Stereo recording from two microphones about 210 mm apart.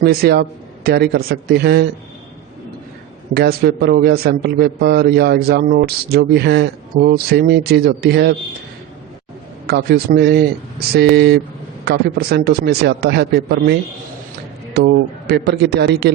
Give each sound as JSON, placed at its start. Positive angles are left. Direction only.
{"t": 0.0, "sound": "a man's voice", "side_deg": -50}
{"t": 3.3, "sound": "a man's voice", "side_deg": -50}
{"t": 9.6, "sound": "a man's voice", "side_deg": -50}